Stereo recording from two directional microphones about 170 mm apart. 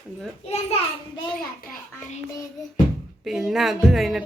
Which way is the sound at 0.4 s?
35° left (ahead or behind).